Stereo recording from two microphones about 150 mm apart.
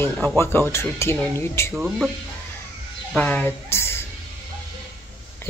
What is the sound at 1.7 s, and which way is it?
Speech, 5° right (ahead or behind).